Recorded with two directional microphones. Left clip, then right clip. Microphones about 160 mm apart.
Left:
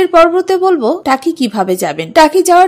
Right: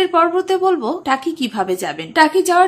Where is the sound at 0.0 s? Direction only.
35° left (ahead or behind).